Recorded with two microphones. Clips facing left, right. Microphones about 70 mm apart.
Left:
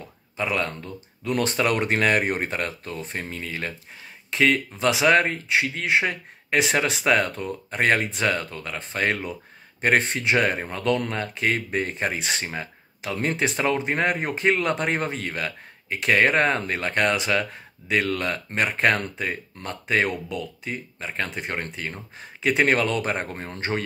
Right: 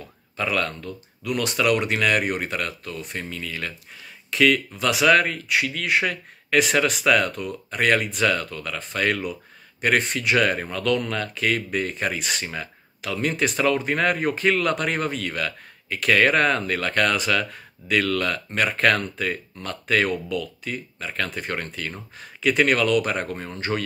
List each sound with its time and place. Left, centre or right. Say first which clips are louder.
0.4 s speech: right 1 dB; left